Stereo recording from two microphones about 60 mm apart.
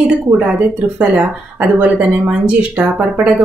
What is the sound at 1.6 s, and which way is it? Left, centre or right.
Speech, right.